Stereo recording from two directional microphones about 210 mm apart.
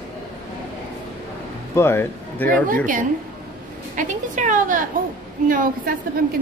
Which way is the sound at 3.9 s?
40° right (ahead or behind).